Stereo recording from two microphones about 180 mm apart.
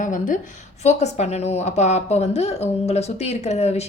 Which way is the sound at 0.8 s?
40° left (ahead or behind).